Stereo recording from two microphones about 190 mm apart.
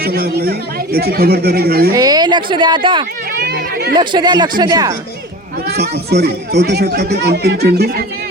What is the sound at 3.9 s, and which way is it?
Speech, 25° right (ahead or behind).